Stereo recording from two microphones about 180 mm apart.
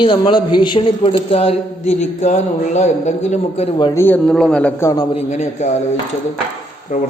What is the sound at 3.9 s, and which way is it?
Speech, 10° left (ahead or behind).